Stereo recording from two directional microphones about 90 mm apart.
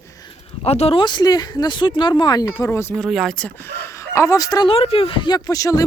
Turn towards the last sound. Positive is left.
turn(degrees=40)  # may be behind; listen again after turning